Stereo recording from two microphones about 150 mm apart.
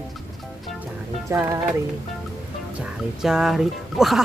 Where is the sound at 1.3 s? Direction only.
15° right (ahead or behind).